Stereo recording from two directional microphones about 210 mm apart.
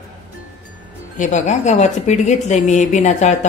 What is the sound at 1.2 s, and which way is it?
A woman's voice, 35° left (ahead or behind).